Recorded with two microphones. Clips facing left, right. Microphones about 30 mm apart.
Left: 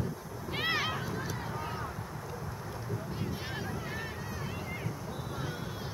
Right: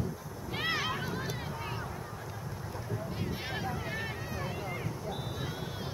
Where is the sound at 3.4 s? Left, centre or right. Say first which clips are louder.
Right 2 dB; centre.